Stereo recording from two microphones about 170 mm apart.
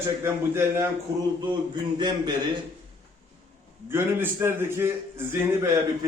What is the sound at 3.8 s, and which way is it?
Speech, 15° right (ahead or behind).